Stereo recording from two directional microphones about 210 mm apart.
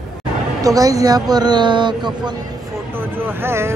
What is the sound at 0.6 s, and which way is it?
Speech, 15° right (ahead or behind).